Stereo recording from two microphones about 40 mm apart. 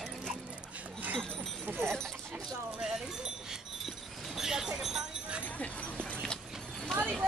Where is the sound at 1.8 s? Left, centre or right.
Right.